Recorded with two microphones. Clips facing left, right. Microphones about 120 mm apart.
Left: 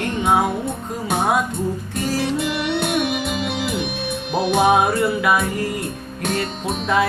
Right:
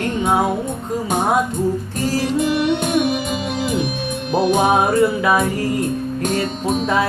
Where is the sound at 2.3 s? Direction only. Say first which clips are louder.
Right 4 dB; 45° right (ahead or behind).